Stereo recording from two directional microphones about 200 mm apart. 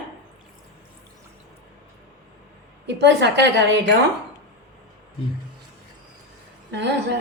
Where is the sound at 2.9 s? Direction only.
60° right (ahead or behind).